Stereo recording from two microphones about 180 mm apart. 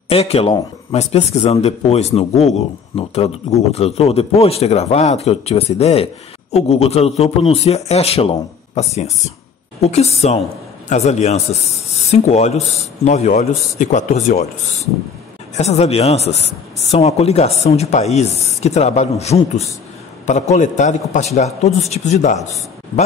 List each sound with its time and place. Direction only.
0.1 s a man's voice: 35° left (ahead or behind)
15.5 s a man's voice: 35° left (ahead or behind)